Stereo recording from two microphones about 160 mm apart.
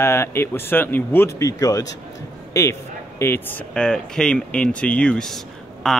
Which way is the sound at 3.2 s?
15° left (ahead or behind).